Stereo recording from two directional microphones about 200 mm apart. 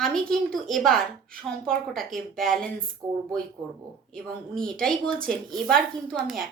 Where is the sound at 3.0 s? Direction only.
15° right (ahead or behind).